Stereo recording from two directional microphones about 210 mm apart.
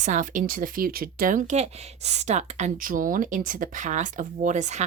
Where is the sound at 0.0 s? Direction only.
35° right (ahead or behind).